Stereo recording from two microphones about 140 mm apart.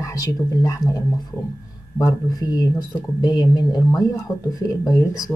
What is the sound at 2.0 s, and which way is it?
Speech, 25° left (ahead or behind).